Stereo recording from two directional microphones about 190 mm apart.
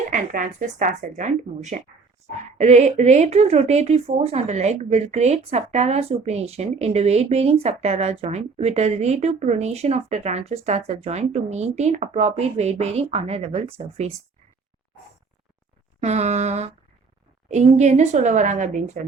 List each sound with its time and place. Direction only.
0.1 s a woman's voice: 45° right (ahead or behind)
16.0 s a woman's voice: 35° right (ahead or behind)